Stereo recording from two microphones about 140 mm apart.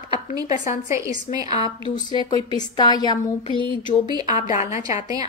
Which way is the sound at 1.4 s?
45° left (ahead or behind).